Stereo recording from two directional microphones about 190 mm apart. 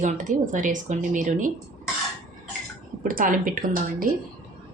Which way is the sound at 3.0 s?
45° right (ahead or behind).